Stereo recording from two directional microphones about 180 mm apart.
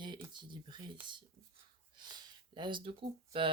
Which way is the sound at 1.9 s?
25° right (ahead or behind).